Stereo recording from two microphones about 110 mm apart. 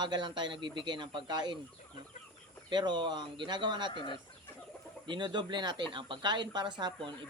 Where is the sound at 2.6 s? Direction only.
45° right (ahead or behind).